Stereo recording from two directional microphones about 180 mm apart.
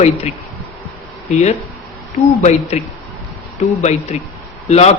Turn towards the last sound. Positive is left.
turn(degrees=35)  # may be behind; listen again after turning